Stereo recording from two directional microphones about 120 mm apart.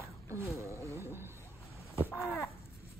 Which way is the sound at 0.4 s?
25° left (ahead or behind).